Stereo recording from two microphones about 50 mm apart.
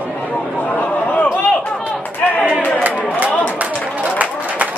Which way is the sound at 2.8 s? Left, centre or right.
Right.